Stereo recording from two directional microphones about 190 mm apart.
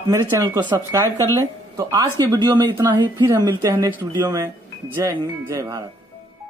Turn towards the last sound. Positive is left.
turn(degrees=-15)  # may be behind; listen again after turning